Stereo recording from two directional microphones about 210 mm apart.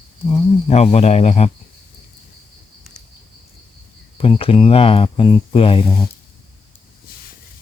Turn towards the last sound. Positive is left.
turn(degrees=25)  # may be behind; listen again after turning